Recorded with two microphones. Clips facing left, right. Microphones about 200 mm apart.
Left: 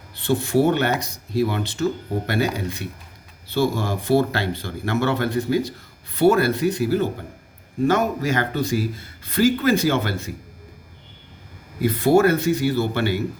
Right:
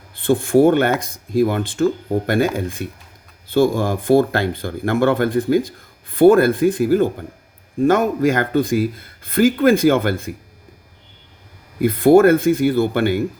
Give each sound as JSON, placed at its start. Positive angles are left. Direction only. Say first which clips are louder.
{"t": 0.2, "sound": "speech", "louder": "right 5 dB", "side_deg": -50}
{"t": 11.8, "sound": "speech", "louder": "right 5 dB", "side_deg": -55}